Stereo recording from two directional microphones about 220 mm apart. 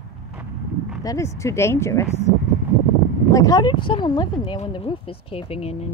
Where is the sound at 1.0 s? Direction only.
15° left (ahead or behind).